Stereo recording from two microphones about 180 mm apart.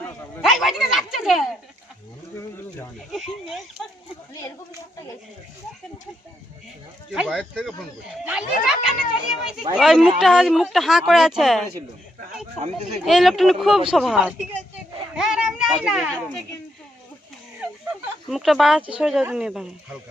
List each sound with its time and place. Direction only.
0.4 s a sound: centre (ahead or behind)
3.1 s speech: centre (ahead or behind)
7.1 s speech: 5° right (ahead or behind)
12.5 s speech: 40° right (ahead or behind)
13.1 s speech: centre (ahead or behind)
18.3 s speech: centre (ahead or behind)